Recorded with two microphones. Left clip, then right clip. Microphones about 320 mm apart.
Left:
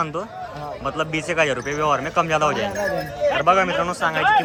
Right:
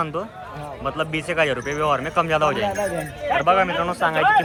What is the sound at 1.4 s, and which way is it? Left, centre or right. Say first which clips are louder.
A man's voice: even; centre.